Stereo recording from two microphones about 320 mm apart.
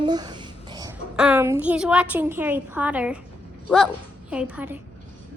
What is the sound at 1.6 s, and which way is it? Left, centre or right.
A child's voice, centre.